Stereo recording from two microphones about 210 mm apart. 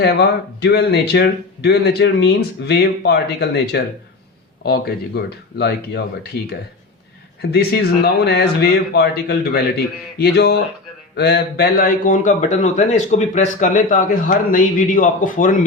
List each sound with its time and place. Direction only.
0.0 s a man's voice: 50° left (ahead or behind)
7.5 s a man's voice: 50° left (ahead or behind)